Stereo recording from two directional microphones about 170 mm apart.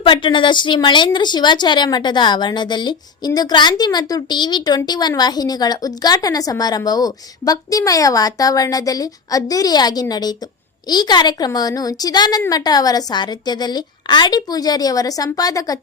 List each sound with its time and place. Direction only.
0.0 s a woman's voice: 30° left (ahead or behind)